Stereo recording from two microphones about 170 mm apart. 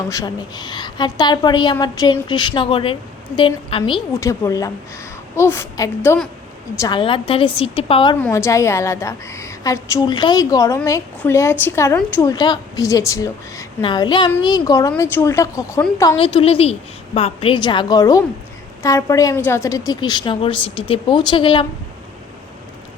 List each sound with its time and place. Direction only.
0.1 s a woman's voice: 20° left (ahead or behind)
4.1 s a woman's voice: 20° left (ahead or behind); by 8.1 s 35° left (ahead or behind)
8.2 s a woman's voice: 15° left (ahead or behind)
16.1 s a woman's voice: 35° left (ahead or behind)